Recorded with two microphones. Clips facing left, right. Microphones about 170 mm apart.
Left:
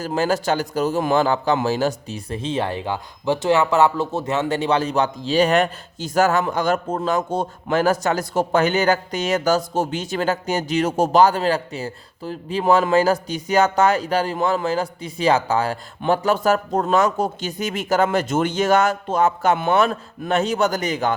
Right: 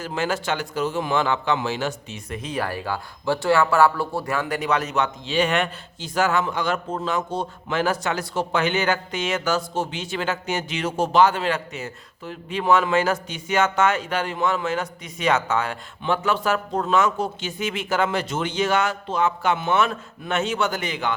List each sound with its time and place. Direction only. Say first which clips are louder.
0.0 s a man's voice: left 5 dB; 40° left (ahead or behind)